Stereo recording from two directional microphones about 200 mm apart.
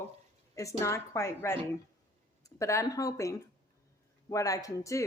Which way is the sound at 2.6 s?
15° left (ahead or behind).